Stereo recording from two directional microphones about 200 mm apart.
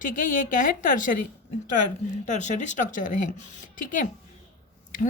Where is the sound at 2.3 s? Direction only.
35° left (ahead or behind).